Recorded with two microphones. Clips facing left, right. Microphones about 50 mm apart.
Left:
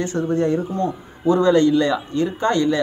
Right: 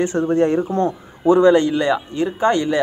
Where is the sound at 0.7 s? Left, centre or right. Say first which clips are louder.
Right 3 dB; right.